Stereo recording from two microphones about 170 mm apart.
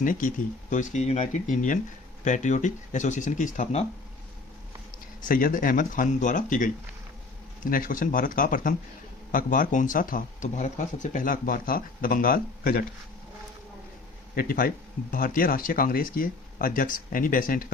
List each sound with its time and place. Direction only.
0.0 s speech: 50° left (ahead or behind)
4.9 s speech: 55° left (ahead or behind)
14.3 s speech: 55° left (ahead or behind)